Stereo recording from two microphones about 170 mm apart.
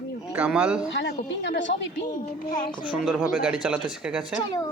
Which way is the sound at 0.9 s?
90° left.